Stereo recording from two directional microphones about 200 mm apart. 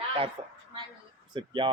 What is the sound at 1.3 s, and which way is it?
Speech, 25° right (ahead or behind).